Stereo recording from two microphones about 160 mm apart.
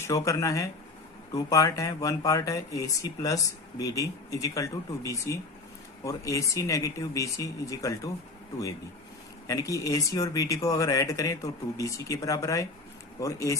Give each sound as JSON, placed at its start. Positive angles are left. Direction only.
{"t": 0.0, "sound": "speech", "side_deg": 20}
{"t": 9.5, "sound": "speech", "side_deg": 20}